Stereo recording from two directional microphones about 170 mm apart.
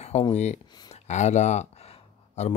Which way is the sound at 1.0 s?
45° left (ahead or behind).